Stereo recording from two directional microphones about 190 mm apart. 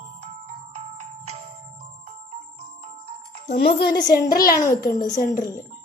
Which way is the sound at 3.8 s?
20° left (ahead or behind).